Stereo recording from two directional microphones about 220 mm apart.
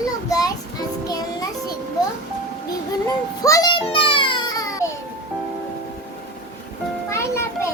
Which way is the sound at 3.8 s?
25° left (ahead or behind).